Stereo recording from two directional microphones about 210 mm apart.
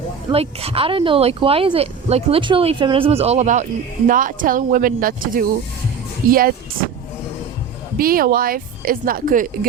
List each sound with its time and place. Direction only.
0.3 s speech: 25° right (ahead or behind); by 6.4 s 45° right (ahead or behind)
7.9 s speech: 45° right (ahead or behind)